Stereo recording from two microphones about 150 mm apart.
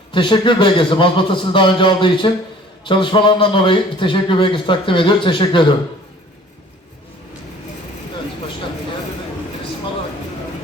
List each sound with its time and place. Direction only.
0.1 s a man's voice: 35° left (ahead or behind)